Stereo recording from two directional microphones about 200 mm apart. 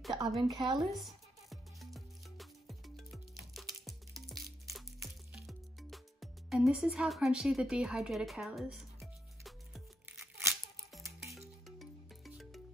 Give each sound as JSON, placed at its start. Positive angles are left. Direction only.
{"t": 0.1, "sound": "speech", "side_deg": -20}
{"t": 0.9, "sound": "music", "side_deg": 0}
{"t": 11.3, "sound": "music", "side_deg": 0}